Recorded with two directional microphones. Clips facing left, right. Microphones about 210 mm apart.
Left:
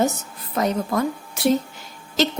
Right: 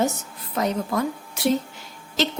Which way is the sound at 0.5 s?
45° left (ahead or behind).